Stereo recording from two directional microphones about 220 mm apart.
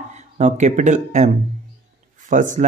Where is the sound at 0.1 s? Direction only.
35° right (ahead or behind).